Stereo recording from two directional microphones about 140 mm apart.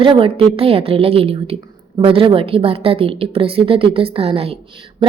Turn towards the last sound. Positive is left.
turn(degrees=-45)  # may be behind; listen again after turning